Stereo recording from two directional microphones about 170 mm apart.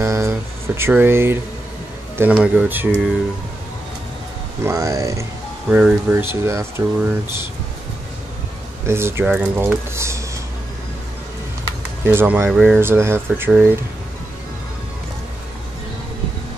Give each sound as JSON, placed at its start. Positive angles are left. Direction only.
{"t": 0.0, "sound": "speech", "side_deg": -15}
{"t": 4.6, "sound": "speech", "side_deg": -20}
{"t": 8.8, "sound": "speech", "side_deg": -15}
{"t": 12.1, "sound": "speech", "side_deg": -15}